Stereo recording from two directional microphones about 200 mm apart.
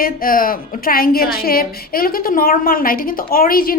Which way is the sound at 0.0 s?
45° left (ahead or behind).